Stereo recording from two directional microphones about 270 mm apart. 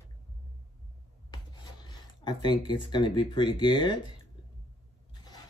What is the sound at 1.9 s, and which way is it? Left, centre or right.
Speech, centre.